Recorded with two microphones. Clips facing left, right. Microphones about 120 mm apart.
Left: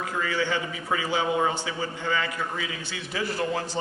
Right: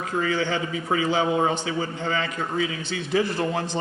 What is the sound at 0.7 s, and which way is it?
A man's voice, 25° right (ahead or behind).